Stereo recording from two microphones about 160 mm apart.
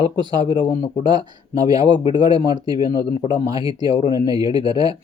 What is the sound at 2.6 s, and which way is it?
Speech, 25° right (ahead or behind).